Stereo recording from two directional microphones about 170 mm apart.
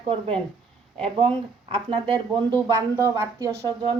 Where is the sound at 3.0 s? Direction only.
15° right (ahead or behind).